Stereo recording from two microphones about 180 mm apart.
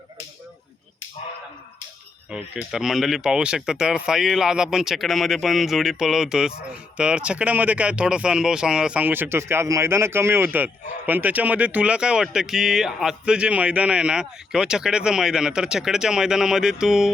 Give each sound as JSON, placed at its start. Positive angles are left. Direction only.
{"t": 2.3, "sound": "speech", "side_deg": 0}